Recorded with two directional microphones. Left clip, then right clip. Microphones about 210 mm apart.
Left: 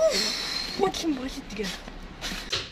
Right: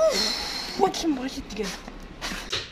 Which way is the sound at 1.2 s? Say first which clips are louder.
Right 2 dB; centre (ahead or behind).